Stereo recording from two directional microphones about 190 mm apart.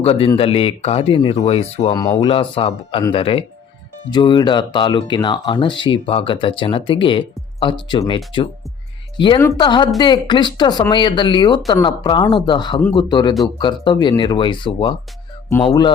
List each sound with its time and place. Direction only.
0.0 s speech: 30° left (ahead or behind)